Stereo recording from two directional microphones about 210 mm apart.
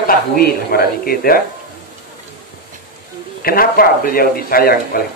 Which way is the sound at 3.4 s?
45° left (ahead or behind).